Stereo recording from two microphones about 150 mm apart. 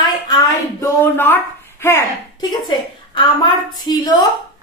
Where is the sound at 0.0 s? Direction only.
25° left (ahead or behind).